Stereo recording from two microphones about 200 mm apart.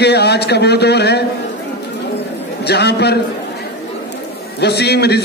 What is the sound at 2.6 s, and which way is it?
Speech, 55° left (ahead or behind).